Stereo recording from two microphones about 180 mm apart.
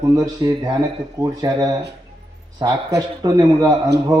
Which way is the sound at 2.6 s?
20° right (ahead or behind).